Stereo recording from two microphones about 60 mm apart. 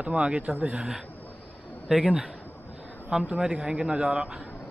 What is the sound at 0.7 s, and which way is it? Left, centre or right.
Speech, centre.